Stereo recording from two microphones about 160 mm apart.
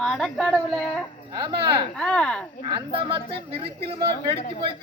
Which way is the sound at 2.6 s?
30° right (ahead or behind).